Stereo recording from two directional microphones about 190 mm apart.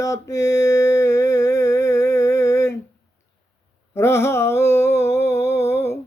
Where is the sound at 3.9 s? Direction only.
15° left (ahead or behind).